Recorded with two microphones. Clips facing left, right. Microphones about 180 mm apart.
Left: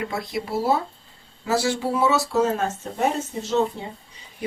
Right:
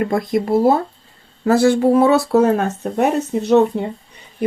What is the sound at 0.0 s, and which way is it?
Speech, 50° right (ahead or behind).